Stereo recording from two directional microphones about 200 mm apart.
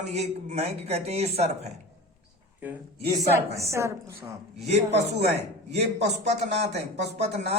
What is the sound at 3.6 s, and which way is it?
Speech, 15° right (ahead or behind).